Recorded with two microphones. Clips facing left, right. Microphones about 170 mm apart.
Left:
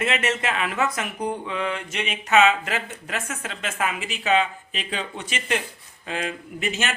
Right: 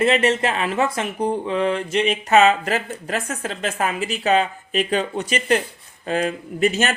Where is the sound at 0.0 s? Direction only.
35° right (ahead or behind).